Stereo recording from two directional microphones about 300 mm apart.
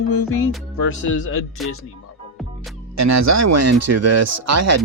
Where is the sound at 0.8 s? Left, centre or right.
Left.